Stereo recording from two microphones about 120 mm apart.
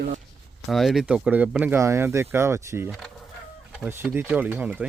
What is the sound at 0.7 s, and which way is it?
Speech, centre (ahead or behind).